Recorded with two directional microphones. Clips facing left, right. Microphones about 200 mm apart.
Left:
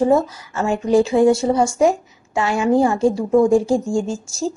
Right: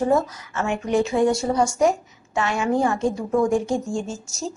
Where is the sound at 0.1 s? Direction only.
30° left (ahead or behind).